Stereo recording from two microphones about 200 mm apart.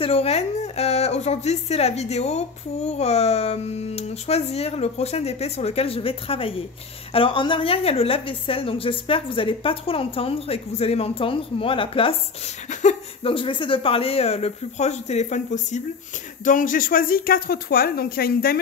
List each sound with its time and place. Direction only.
0.0 s a woman's voice: 30° left (ahead or behind); by 18.6 s 50° left (ahead or behind)